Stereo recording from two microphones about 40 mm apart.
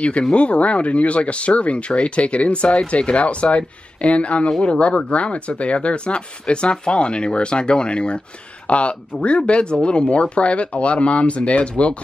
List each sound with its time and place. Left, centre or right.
0.3 s speech: left